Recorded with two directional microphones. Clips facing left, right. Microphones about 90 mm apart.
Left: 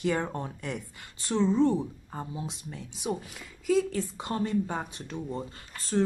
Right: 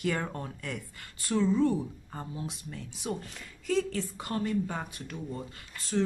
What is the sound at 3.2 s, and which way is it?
Speech, 5° left (ahead or behind).